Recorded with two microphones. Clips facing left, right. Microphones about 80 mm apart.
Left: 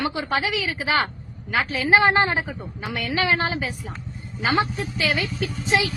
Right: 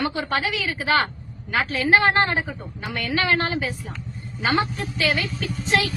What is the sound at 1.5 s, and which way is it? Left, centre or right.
Speech, centre.